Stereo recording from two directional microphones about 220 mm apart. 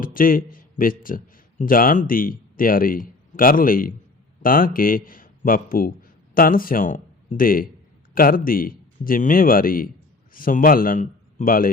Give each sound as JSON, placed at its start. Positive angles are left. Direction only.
{"t": 0.0, "sound": "a man's voice", "side_deg": 40}